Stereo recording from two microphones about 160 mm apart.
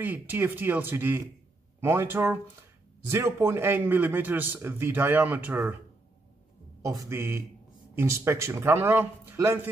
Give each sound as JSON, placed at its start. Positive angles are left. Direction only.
{"t": 0.0, "sound": "a man's voice", "side_deg": -10}
{"t": 6.8, "sound": "a man's voice", "side_deg": -20}